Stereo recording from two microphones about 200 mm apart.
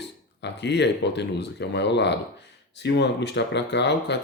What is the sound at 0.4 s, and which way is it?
Speech, 60° left (ahead or behind).